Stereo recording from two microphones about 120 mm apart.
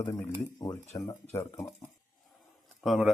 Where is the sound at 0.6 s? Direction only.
30° left (ahead or behind).